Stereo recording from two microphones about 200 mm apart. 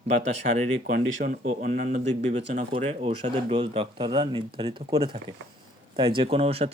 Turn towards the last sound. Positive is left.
turn(degrees=-30)  # may be behind; listen again after turning